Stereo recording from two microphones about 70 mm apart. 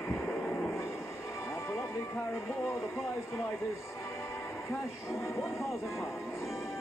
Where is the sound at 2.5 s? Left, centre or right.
Left.